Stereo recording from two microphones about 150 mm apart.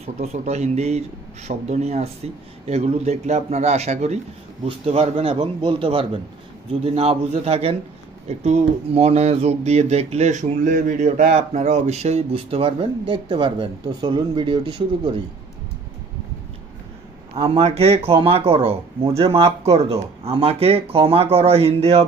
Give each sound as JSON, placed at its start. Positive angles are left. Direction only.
{"t": 0.0, "sound": "speech", "side_deg": -45}
{"t": 17.3, "sound": "speech", "side_deg": -40}